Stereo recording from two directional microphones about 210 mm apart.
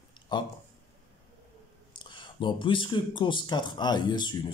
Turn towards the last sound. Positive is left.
turn(degrees=20)  # may be behind; listen again after turning